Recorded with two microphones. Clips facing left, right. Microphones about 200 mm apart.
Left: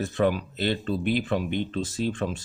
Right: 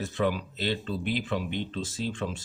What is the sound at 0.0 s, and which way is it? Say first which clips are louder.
Speech: left 4 dB; 55° left (ahead or behind).